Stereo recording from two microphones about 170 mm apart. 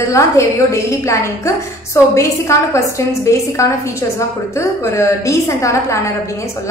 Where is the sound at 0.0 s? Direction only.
15° left (ahead or behind).